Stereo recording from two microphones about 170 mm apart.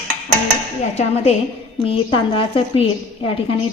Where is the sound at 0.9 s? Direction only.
40° left (ahead or behind).